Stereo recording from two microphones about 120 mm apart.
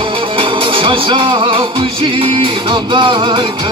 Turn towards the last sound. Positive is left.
turn(degrees=-40)  # may be behind; listen again after turning